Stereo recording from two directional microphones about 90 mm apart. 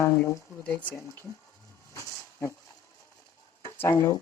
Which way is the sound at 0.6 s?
15° left (ahead or behind).